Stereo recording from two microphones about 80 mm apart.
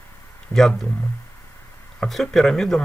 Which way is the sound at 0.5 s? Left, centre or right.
Centre.